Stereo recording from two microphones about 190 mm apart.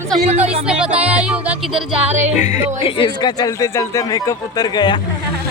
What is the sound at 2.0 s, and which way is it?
Speech, 35° right (ahead or behind).